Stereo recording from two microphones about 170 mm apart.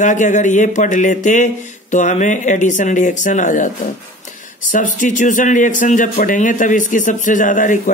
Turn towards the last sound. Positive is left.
turn(degrees=50)  # may be behind; listen again after turning